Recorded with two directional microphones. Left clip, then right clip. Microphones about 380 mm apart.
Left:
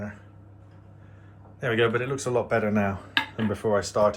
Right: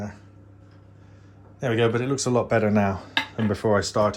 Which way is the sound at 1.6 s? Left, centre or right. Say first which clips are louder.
Right 1 dB; centre.